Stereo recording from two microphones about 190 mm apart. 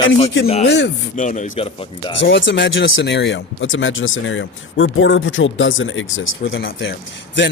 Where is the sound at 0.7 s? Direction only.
65° left (ahead or behind).